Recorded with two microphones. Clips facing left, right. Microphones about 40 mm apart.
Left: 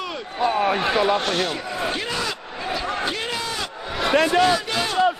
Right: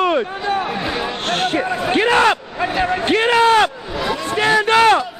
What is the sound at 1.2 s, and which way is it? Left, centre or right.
A man's voice, right.